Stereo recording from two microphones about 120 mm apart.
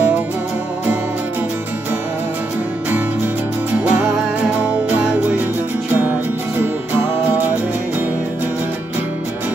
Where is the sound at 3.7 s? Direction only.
10° right (ahead or behind).